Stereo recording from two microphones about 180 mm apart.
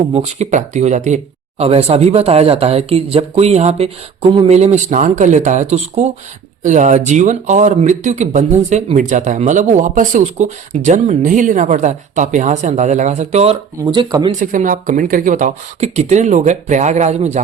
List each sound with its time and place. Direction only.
0.1 s speech: 40° right (ahead or behind)
13.8 s speech: 25° right (ahead or behind)
14.3 s speech: 45° right (ahead or behind)